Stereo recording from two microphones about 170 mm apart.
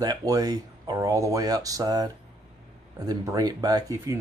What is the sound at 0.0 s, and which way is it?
Speech, 20° right (ahead or behind).